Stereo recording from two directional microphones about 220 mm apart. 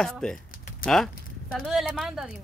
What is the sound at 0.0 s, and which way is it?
Speech, 5° left (ahead or behind).